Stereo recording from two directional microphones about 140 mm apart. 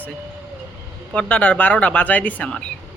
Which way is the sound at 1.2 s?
10° left (ahead or behind).